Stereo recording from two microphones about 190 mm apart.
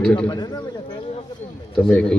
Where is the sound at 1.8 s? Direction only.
5° left (ahead or behind).